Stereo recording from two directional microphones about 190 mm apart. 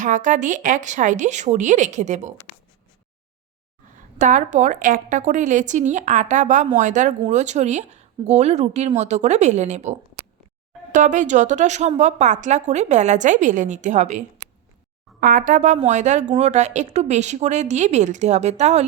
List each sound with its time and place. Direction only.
0.0 s a woman's voice: 40° right (ahead or behind)
4.2 s a woman's voice: 40° right (ahead or behind)